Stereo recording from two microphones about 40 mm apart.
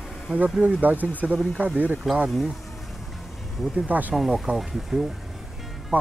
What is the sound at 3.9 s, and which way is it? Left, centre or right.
Speech, right.